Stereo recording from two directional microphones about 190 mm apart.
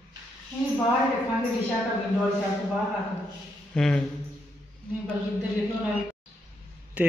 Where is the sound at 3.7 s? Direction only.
5° left (ahead or behind).